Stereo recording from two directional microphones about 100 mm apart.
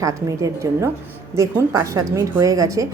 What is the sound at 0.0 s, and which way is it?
A woman's voice, 35° right (ahead or behind).